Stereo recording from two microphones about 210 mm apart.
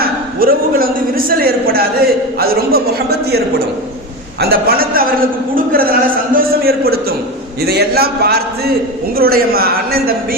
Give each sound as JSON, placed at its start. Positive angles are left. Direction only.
{"t": 0.0, "sound": "a man's voice", "side_deg": -45}